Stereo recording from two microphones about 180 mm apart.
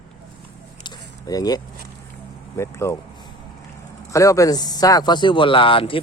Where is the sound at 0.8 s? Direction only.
20° left (ahead or behind).